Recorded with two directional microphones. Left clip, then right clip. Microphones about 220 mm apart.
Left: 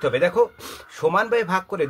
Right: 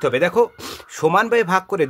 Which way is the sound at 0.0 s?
45° right (ahead or behind).